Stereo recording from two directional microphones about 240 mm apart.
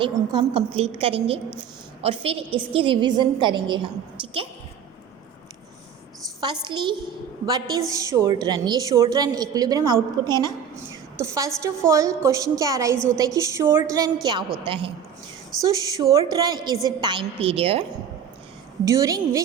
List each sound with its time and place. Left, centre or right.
0.0 s a woman's voice: right
6.7 s a woman's voice: centre
11.2 s a woman's voice: centre
18.9 s a woman's voice: centre